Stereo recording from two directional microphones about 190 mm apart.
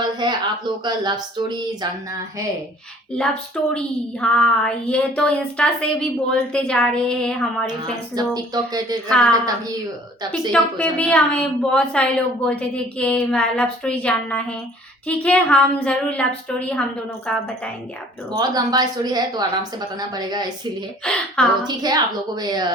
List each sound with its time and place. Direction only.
0.0 s a woman's voice: 25° right (ahead or behind)
3.2 s a woman's voice: 5° left (ahead or behind)
8.1 s a woman's voice: 20° right (ahead or behind)
10.5 s a woman's voice: 5° left (ahead or behind)
18.3 s a woman's voice: 20° right (ahead or behind)
21.0 s a woman's voice: 5° left (ahead or behind)
21.8 s a woman's voice: 20° right (ahead or behind)